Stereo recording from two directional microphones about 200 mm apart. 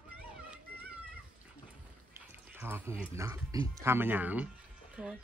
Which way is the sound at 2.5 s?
10° right (ahead or behind).